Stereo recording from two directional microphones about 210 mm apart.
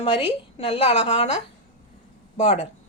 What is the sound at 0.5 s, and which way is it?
Speech, 25° left (ahead or behind).